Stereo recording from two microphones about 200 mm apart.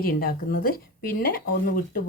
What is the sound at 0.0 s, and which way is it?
Speech, 45° left (ahead or behind).